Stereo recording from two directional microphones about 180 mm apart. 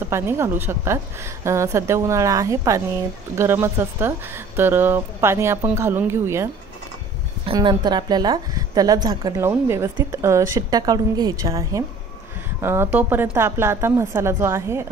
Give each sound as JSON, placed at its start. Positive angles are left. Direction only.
{"t": 0.1, "sound": "speech", "side_deg": -15}
{"t": 7.4, "sound": "a woman's voice", "side_deg": -25}